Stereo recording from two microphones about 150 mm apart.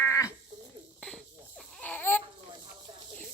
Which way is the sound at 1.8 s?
10° left (ahead or behind).